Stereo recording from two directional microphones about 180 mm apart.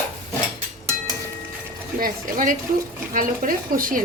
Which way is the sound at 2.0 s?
50° right (ahead or behind).